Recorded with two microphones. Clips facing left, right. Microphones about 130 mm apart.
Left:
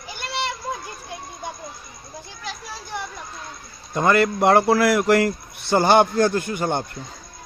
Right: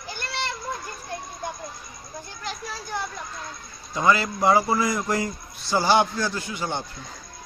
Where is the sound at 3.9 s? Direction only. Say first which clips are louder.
Left 4 dB; 55° left (ahead or behind).